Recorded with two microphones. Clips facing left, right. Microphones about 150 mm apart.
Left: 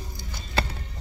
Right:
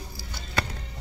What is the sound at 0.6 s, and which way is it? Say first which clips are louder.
Music: left 2 dB; 30° left (ahead or behind).